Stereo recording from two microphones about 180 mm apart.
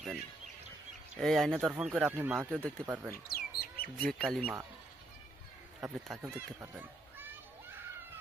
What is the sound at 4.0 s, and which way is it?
Speech, 5° left (ahead or behind).